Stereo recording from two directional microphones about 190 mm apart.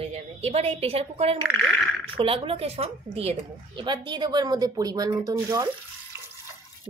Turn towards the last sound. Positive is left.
turn(degrees=-15)  # may be behind; listen again after turning